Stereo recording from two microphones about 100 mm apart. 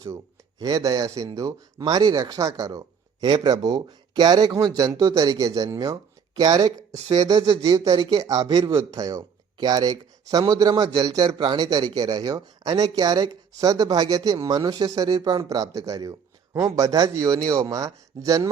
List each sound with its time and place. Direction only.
0.6 s speech: 40° right (ahead or behind)
3.2 s speech: 45° right (ahead or behind)